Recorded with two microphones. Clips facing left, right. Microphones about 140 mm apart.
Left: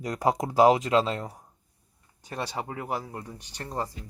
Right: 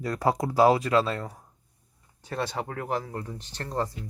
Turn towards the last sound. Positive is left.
turn(degrees=10)  # may be behind; listen again after turning